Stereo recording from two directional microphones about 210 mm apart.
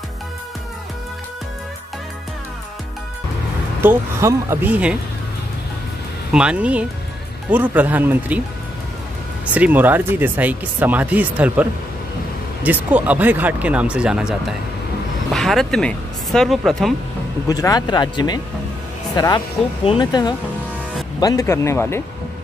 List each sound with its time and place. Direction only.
3.8 s speech: 10° right (ahead or behind)
6.3 s speech: 5° right (ahead or behind)
9.5 s speech: 5° right (ahead or behind)
15.3 s speech: centre (ahead or behind)
17.5 s speech: 15° left (ahead or behind)